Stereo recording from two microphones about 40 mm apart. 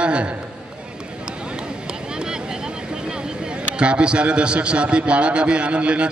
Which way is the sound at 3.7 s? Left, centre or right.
Right.